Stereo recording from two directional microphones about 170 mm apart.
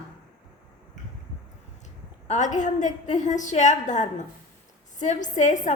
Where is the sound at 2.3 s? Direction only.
45° left (ahead or behind).